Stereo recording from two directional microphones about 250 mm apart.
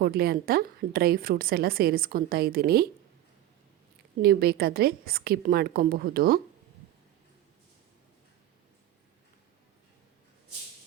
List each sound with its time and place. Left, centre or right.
0.0 s a woman's voice: right
4.2 s a woman's voice: right